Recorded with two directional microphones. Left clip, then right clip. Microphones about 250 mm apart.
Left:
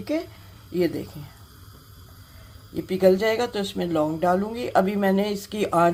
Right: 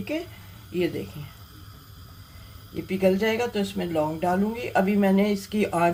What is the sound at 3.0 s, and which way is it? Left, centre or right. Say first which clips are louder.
Speech: left 3 dB; left.